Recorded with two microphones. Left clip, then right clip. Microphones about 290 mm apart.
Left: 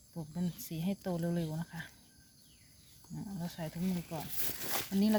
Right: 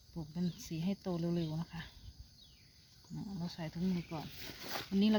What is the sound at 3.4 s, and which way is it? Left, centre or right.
Speech, centre.